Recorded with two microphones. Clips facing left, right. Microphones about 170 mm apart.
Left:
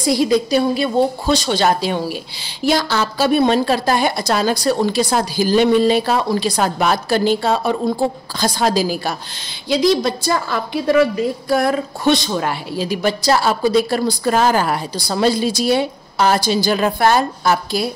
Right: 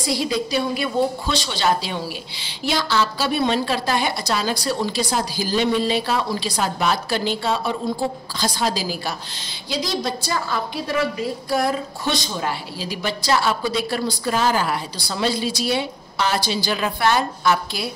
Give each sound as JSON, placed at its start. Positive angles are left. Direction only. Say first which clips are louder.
{"t": 0.1, "sound": "a woman's voice", "louder": "left 7 dB", "side_deg": 45}
{"t": 0.7, "sound": "speech", "louder": "left 5 dB", "side_deg": 30}
{"t": 1.3, "sound": "a woman's voice", "louder": "left 5 dB", "side_deg": 45}
{"t": 9.7, "sound": "a woman's voice", "louder": "left 9 dB", "side_deg": 60}